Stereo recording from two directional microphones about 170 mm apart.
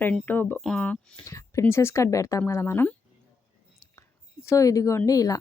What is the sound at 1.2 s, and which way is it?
Speech, 20° left (ahead or behind).